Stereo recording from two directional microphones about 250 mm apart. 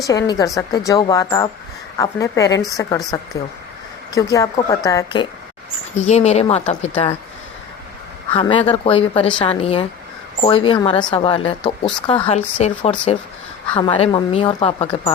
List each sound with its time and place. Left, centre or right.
0.0 s a woman's voice: centre
4.1 s a woman's voice: centre
6.1 s speech: left
8.3 s speech: centre